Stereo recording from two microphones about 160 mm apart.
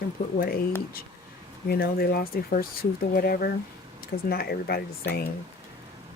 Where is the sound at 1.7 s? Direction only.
75° left (ahead or behind).